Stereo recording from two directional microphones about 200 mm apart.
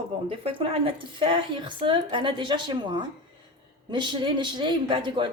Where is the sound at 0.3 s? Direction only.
25° right (ahead or behind).